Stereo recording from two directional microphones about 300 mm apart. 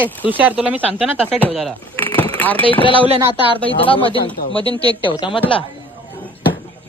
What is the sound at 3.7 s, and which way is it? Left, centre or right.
Speech, centre.